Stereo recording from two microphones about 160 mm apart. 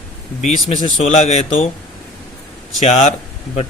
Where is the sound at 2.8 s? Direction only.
45° left (ahead or behind).